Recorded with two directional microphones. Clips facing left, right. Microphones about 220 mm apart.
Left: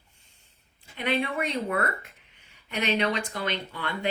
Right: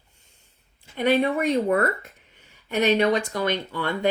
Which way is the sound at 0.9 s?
40° right (ahead or behind).